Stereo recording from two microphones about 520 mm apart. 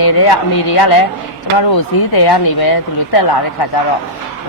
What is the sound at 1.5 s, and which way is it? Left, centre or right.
A woman's voice, left.